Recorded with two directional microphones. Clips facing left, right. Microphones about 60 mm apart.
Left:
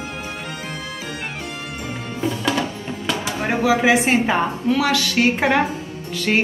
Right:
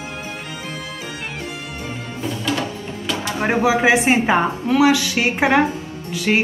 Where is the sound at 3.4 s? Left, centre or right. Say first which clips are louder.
Right 1 dB; right.